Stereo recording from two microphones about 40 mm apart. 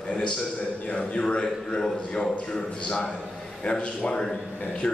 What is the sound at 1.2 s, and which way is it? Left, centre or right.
A man's voice, centre.